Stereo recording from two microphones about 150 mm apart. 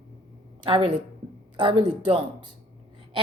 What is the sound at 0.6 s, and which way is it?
A woman's voice, 35° right (ahead or behind).